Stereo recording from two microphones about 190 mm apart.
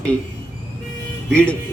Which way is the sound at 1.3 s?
5° left (ahead or behind).